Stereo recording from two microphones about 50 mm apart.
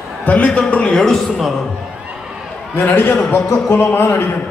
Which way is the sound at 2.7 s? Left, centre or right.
Left.